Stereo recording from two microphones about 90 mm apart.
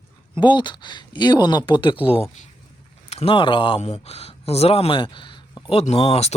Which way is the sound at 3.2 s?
70° left (ahead or behind).